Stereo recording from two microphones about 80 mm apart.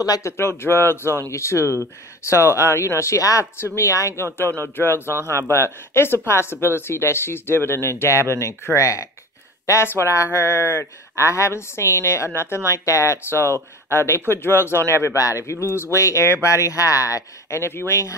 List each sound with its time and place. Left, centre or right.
0.0 s speech: left
0.4 s speech: left
4.6 s speech: left